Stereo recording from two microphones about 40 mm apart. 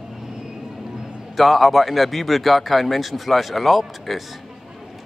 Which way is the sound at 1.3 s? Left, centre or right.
Centre.